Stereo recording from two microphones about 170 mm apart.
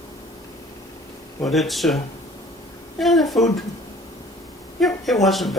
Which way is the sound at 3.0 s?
Centre (ahead or behind).